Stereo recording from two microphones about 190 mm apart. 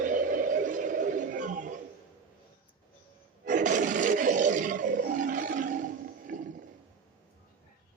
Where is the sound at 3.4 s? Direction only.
40° right (ahead or behind).